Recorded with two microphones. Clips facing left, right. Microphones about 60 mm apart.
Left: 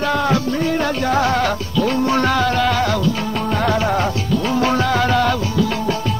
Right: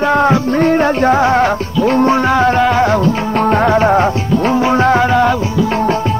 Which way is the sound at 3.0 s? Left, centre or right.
Right.